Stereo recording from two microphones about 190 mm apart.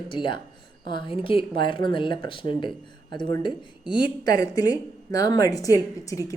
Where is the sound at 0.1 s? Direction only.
25° left (ahead or behind).